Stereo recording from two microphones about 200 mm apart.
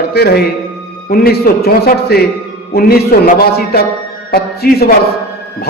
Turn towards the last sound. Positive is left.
turn(degrees=50)  # may be behind; listen again after turning